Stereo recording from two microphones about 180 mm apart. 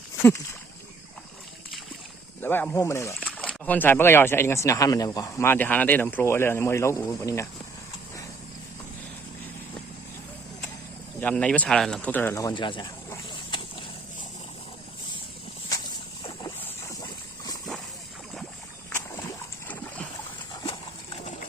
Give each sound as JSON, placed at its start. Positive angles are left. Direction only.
{"t": 2.4, "sound": "speech", "side_deg": 10}
{"t": 3.2, "sound": "speech", "side_deg": 5}
{"t": 11.2, "sound": "speech", "side_deg": 5}
{"t": 17.0, "sound": "a sound", "side_deg": 20}
{"t": 18.9, "sound": "boat", "side_deg": 15}